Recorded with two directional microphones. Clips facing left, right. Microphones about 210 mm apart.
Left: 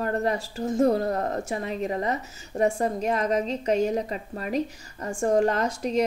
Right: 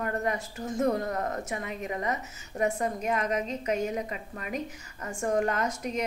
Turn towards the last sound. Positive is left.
turn(degrees=30)  # may be behind; listen again after turning